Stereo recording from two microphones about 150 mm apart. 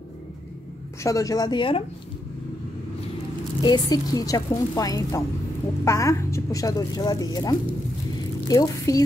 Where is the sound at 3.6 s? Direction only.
25° left (ahead or behind).